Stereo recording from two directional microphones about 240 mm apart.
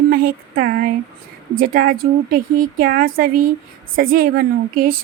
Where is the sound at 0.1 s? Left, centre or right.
Right.